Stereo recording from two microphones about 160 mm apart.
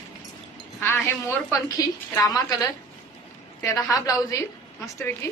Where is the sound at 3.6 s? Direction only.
20° left (ahead or behind).